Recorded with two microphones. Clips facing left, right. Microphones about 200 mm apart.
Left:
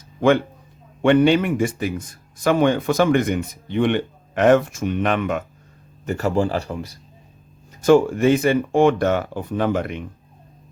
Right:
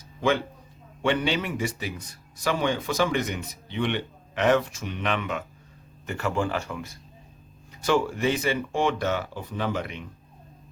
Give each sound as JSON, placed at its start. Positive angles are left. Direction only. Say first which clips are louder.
{"t": 1.0, "sound": "a man's voice", "louder": "left 10 dB", "side_deg": 55}
{"t": 7.8, "sound": "speech", "louder": "left 9 dB", "side_deg": 45}